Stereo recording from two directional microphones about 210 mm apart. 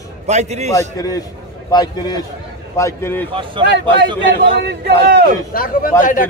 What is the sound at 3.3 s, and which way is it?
Speech, 25° right (ahead or behind).